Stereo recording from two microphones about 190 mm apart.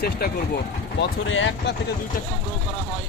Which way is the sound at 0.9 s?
85° left.